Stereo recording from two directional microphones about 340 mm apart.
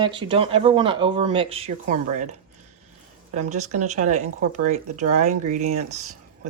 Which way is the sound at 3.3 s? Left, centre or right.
Centre.